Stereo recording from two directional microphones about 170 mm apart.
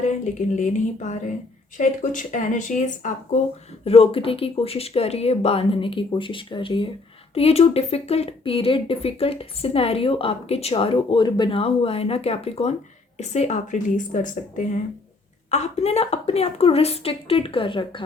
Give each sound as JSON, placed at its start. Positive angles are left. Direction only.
{"t": 0.0, "sound": "speech", "side_deg": 45}
{"t": 3.8, "sound": "speech", "side_deg": 35}